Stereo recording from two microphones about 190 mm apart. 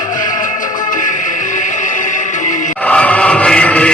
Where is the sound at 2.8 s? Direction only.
5° left (ahead or behind).